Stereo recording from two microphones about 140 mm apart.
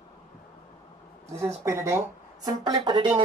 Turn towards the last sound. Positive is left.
turn(degrees=-30)  # may be behind; listen again after turning